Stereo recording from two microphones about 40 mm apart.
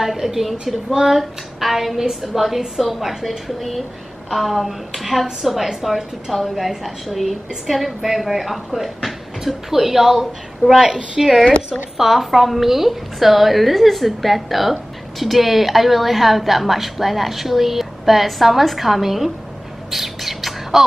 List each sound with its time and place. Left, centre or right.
0.0 s a woman's voice: centre
11.4 s speech: left
12.0 s a woman's voice: centre
19.9 s bird: centre